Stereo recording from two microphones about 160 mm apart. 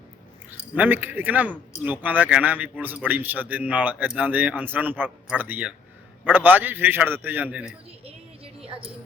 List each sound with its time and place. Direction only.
0.8 s a man's voice: 10° right (ahead or behind)
8.6 s a woman's voice: 35° right (ahead or behind)